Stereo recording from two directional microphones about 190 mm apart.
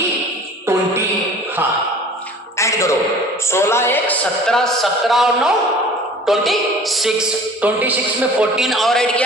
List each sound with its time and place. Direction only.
2.6 s music: 15° left (ahead or behind)
3.5 s speech: 15° left (ahead or behind)